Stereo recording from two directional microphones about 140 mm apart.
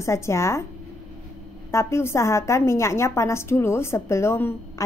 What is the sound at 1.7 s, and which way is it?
A woman's voice, 20° left (ahead or behind).